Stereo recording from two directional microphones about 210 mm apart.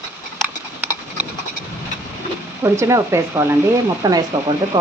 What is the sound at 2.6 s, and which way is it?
Speech, 15° right (ahead or behind).